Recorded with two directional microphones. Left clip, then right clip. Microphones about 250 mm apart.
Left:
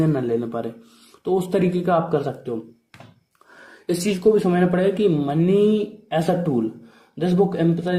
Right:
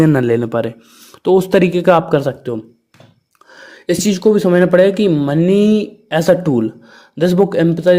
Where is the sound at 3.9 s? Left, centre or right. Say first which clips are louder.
Right 5 dB; right.